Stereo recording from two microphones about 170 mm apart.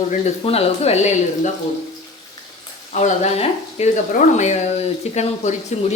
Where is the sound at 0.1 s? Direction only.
40° left (ahead or behind).